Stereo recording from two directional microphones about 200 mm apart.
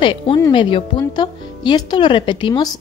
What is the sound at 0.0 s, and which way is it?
A woman's voice, 25° left (ahead or behind).